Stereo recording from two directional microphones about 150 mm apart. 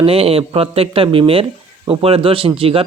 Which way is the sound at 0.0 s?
40° right (ahead or behind).